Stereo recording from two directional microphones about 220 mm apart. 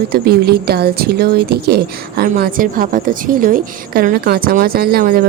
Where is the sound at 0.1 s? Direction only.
45° right (ahead or behind).